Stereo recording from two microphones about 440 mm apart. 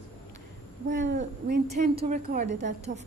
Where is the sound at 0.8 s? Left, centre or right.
Right.